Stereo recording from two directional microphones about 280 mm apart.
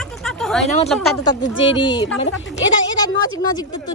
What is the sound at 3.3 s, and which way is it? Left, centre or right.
Speech, centre.